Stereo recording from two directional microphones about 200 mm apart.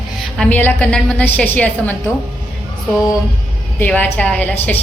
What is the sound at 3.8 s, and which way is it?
Speech, 10° left (ahead or behind).